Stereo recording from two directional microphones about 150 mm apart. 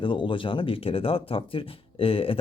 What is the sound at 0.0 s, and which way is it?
Speech, 35° left (ahead or behind).